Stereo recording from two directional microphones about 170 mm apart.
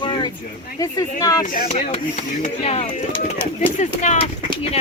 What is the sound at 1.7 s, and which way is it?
Speech, 40° left (ahead or behind).